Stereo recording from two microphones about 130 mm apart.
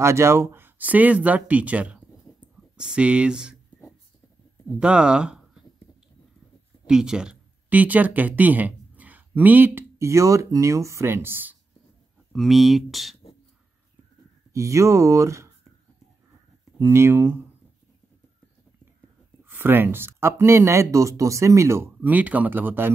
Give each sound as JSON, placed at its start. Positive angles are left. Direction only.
{"t": 0.0, "sound": "speech", "side_deg": -20}
{"t": 4.7, "sound": "speech", "side_deg": -5}
{"t": 6.9, "sound": "speech", "side_deg": -5}
{"t": 12.3, "sound": "speech", "side_deg": 0}
{"t": 14.5, "sound": "speech", "side_deg": -25}
{"t": 16.8, "sound": "speech", "side_deg": -20}
{"t": 19.4, "sound": "speech", "side_deg": -15}